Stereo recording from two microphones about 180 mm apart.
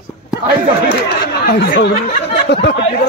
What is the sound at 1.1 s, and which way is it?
Speech, 65° left (ahead or behind).